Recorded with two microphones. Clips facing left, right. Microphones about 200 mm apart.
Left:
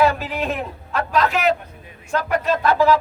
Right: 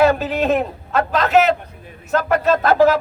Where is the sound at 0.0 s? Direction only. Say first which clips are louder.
Right 4 dB; 45° right (ahead or behind).